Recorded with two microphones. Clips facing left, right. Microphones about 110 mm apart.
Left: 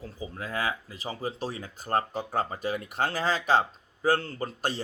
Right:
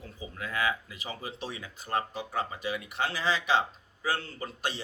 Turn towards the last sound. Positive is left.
turn(degrees=40)  # may be behind; listen again after turning